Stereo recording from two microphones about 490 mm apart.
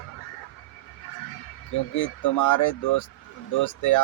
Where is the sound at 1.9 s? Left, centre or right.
Left.